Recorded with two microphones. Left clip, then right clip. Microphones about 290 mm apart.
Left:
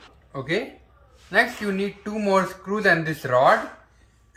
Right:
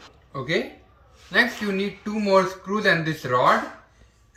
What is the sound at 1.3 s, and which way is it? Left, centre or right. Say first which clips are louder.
Speech: even; centre.